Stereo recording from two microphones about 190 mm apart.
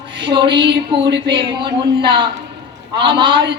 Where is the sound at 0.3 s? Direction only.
25° right (ahead or behind).